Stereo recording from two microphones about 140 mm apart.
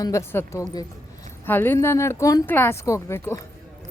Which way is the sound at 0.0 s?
20° left (ahead or behind).